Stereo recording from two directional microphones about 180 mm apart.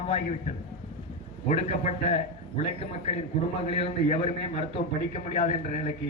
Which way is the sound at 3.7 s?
35° left (ahead or behind).